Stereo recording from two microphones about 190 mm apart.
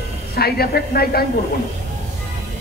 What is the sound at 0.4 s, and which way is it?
Speech, 55° left (ahead or behind).